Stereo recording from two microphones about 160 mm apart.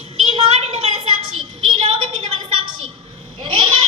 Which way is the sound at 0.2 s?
40° right (ahead or behind).